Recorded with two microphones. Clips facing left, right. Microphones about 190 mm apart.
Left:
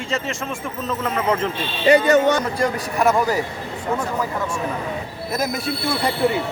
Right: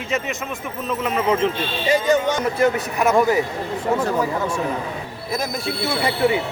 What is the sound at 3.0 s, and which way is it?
Speech, centre (ahead or behind).